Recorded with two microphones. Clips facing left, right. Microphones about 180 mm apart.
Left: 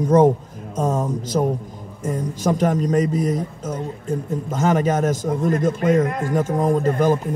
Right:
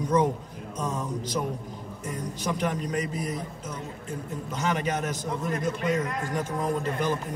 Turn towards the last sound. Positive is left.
turn(degrees=45)  # may be behind; listen again after turning